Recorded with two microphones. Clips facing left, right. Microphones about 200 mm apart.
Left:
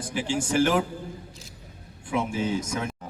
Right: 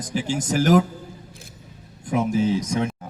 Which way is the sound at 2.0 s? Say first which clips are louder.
Right 6 dB; 40° right (ahead or behind).